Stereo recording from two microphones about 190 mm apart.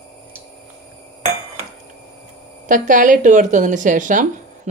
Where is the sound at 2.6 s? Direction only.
45° right (ahead or behind).